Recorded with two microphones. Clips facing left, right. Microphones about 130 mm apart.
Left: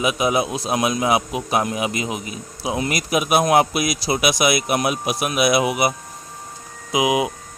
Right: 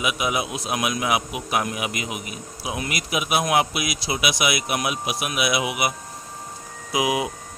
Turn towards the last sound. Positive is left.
turn(degrees=20)  # may be behind; listen again after turning